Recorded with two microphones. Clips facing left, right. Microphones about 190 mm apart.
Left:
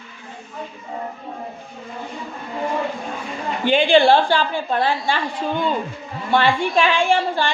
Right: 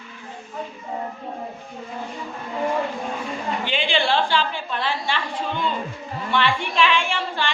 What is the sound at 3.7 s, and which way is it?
A man's voice, 45° left (ahead or behind).